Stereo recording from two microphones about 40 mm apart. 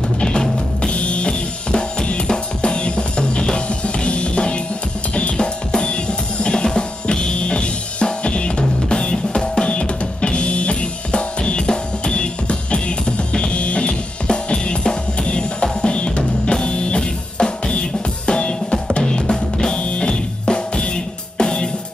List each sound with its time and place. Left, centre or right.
0.2 s drum kit: left
2.2 s music: left
5.1 s drum kit: left
19.8 s music: left